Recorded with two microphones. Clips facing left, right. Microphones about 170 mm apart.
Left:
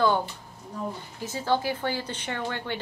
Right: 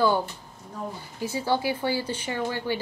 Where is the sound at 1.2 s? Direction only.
10° right (ahead or behind).